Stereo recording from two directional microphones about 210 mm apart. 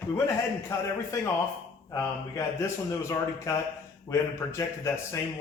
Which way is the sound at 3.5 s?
15° left (ahead or behind).